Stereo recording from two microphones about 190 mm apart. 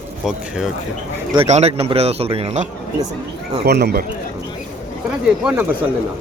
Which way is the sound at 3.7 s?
60° right (ahead or behind).